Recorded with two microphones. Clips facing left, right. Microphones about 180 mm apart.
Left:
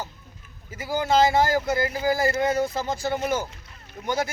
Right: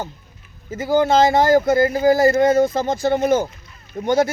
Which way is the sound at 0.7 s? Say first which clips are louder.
Right 7 dB; 45° right (ahead or behind).